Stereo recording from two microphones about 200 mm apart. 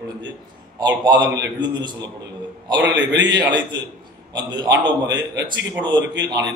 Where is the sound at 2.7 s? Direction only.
65° right (ahead or behind).